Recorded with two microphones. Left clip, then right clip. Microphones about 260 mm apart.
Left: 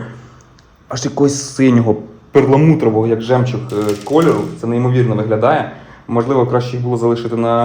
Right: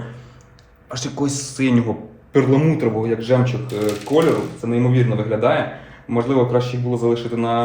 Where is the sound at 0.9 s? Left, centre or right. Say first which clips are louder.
Left 9 dB; left.